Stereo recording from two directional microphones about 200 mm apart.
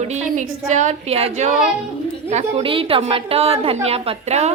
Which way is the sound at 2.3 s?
30° right (ahead or behind).